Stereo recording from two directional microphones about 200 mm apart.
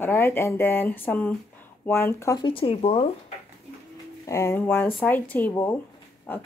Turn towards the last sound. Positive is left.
turn(degrees=10)  # may be behind; listen again after turning